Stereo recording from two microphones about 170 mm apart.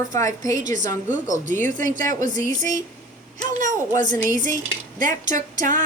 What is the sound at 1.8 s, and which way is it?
Speech, 50° right (ahead or behind).